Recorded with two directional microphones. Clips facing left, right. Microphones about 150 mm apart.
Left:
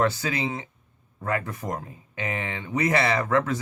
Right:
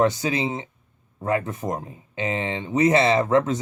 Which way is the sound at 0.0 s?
20° right (ahead or behind).